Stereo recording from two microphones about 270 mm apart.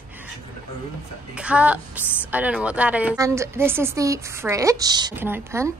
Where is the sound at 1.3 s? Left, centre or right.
Centre.